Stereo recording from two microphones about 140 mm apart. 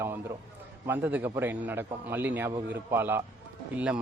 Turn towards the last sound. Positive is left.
turn(degrees=-10)  # may be behind; listen again after turning